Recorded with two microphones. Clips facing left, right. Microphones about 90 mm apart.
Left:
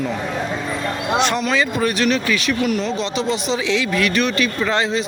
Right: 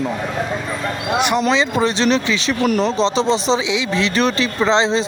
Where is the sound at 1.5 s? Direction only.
25° right (ahead or behind).